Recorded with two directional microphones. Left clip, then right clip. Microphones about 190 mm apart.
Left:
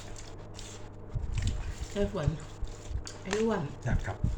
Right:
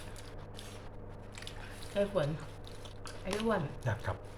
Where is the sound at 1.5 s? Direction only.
20° right (ahead or behind).